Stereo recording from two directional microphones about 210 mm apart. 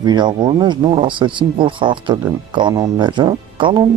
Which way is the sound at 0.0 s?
20° right (ahead or behind).